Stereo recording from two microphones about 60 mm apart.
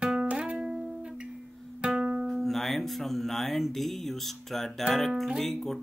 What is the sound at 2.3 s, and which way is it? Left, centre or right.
Speech, centre.